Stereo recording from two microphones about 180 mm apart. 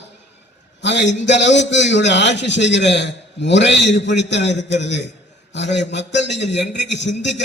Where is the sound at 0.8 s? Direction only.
80° left.